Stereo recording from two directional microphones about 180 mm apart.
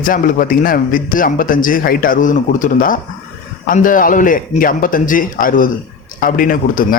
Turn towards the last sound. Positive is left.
turn(degrees=50)  # may be behind; listen again after turning